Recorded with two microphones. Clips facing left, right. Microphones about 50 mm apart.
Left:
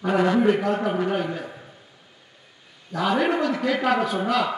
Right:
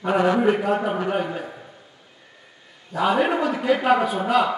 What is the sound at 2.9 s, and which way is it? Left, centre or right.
A man's voice, centre.